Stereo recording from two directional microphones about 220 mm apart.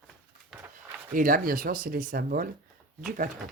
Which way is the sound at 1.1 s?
40° right (ahead or behind).